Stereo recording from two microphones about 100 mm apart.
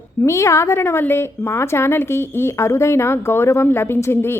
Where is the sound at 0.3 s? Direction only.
30° left (ahead or behind).